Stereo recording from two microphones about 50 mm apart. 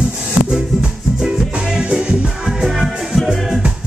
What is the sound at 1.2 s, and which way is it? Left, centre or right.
Music, centre.